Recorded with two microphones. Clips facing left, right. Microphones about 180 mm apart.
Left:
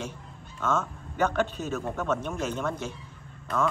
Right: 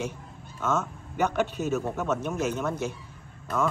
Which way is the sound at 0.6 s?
5° right (ahead or behind).